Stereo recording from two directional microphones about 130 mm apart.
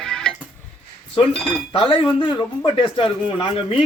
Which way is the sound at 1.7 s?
45° left (ahead or behind).